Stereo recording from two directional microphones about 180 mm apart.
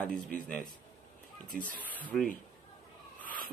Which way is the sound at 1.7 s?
10° left (ahead or behind).